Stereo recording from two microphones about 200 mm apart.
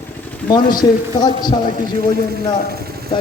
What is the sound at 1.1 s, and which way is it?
Speech, 20° left (ahead or behind).